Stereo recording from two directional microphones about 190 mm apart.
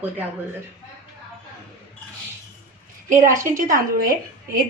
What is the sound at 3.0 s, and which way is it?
A woman's voice, 45° right (ahead or behind).